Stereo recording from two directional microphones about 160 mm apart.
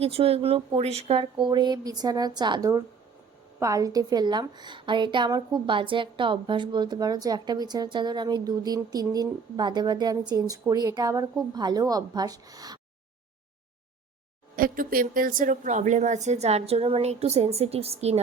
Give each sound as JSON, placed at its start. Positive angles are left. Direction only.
{"t": 0.0, "sound": "a woman's voice", "side_deg": -40}
{"t": 14.5, "sound": "speech", "side_deg": -60}